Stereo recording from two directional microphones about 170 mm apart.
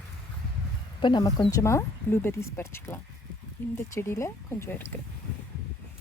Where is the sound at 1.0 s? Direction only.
25° left (ahead or behind).